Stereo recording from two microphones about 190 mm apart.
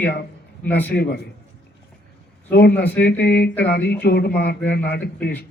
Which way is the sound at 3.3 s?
60° left (ahead or behind).